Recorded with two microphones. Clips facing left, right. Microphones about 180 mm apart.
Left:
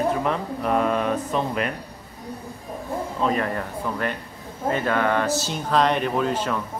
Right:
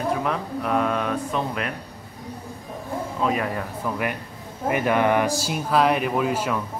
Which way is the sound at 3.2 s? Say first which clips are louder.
Left 1 dB; 5° right (ahead or behind).